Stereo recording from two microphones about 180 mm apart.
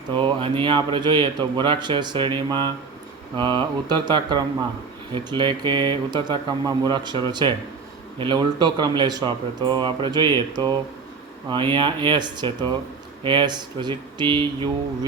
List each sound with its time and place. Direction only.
0.1 s speech: 25° right (ahead or behind)